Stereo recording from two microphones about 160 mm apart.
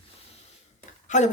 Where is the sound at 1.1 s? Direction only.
50° left (ahead or behind).